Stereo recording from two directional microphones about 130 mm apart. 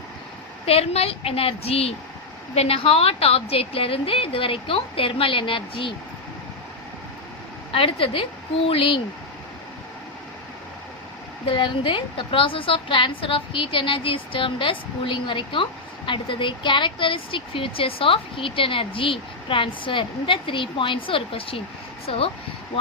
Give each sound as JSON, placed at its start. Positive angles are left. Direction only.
{"t": 0.6, "sound": "a woman's voice", "side_deg": 50}
{"t": 7.7, "sound": "a woman's voice", "side_deg": 45}
{"t": 11.5, "sound": "a woman's voice", "side_deg": 40}